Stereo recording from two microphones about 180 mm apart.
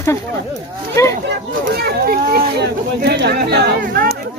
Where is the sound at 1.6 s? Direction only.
55° right (ahead or behind).